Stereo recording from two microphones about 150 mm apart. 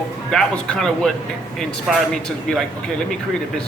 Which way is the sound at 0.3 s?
5° left (ahead or behind).